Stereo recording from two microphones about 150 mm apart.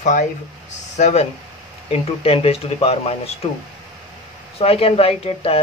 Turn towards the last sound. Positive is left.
turn(degrees=40)  # may be behind; listen again after turning